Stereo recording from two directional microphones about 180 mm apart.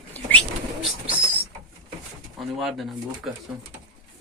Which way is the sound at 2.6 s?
Centre (ahead or behind).